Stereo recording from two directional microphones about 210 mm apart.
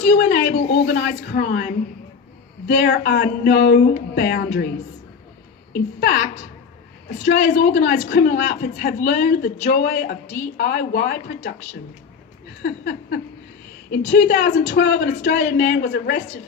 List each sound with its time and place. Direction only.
0.1 s a woman's voice: 50° left (ahead or behind)
5.7 s a woman's voice: 50° left (ahead or behind)
7.3 s a woman's voice: 55° left (ahead or behind)